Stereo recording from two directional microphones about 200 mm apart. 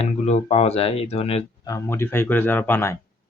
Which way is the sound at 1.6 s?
15° left (ahead or behind).